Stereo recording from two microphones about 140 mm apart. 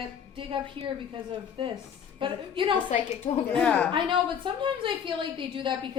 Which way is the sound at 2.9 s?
50° left (ahead or behind).